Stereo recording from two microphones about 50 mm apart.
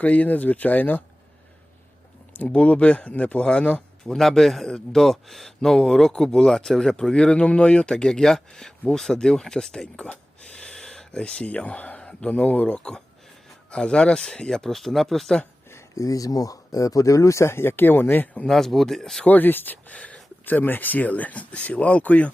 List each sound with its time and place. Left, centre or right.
0.0 s speech: left
2.3 s speech: left
3.4 s a man's voice: centre
4.0 s a man's voice: centre
16.0 s speech: left
18.4 s a man's voice: centre
19.2 s speech: left